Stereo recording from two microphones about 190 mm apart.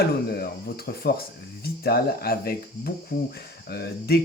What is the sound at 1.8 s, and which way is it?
Speech, 55° left (ahead or behind).